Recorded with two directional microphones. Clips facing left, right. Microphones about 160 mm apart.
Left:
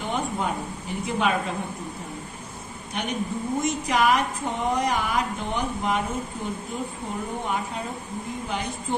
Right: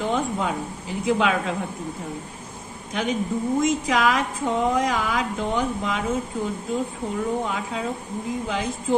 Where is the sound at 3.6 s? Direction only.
90° right.